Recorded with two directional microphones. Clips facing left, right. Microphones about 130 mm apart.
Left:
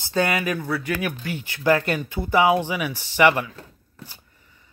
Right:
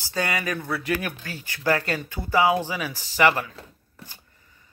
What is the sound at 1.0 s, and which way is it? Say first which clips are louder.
Speech: left 5 dB; 15° left (ahead or behind).